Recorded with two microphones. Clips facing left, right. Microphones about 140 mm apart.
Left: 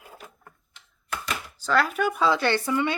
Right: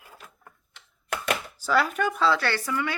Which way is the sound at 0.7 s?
60° right (ahead or behind).